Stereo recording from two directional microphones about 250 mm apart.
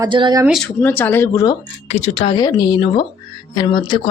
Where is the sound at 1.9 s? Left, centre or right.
Left.